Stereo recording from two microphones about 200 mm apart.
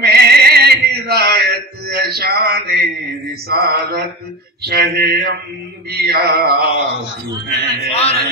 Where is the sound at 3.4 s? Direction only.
50° right (ahead or behind).